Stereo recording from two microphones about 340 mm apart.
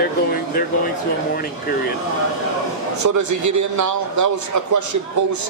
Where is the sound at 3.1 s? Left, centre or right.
Right.